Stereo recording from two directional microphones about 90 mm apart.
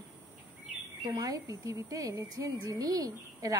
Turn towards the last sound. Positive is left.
turn(degrees=-40)  # may be behind; listen again after turning